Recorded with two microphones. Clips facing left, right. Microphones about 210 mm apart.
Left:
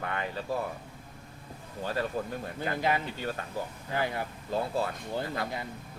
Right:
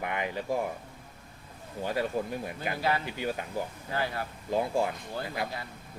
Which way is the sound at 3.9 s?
20° left (ahead or behind).